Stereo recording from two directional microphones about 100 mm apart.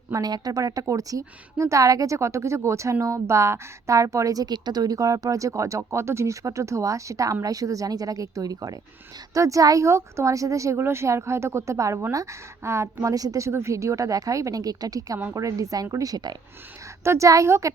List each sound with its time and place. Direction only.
0.1 s a woman's voice: 40° right (ahead or behind)
17.0 s a woman's voice: 30° right (ahead or behind)